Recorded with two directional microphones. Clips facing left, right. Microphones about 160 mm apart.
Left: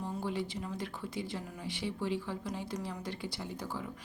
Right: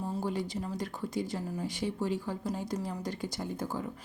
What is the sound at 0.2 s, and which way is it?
Speech, 40° right (ahead or behind).